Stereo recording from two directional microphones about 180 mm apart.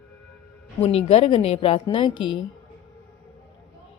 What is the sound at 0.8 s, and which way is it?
Speech, 35° left (ahead or behind).